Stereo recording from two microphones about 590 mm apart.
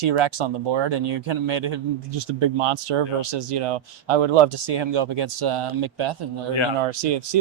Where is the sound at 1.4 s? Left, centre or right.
Right.